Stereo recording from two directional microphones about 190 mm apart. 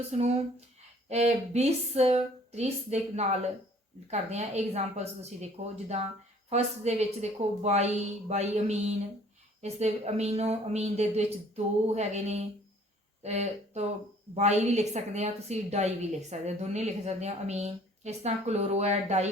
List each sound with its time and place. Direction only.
0.1 s a woman's voice: 35° right (ahead or behind)
6.5 s a woman's voice: 35° right (ahead or behind)